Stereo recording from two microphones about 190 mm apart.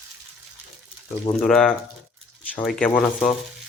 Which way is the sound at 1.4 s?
5° left (ahead or behind).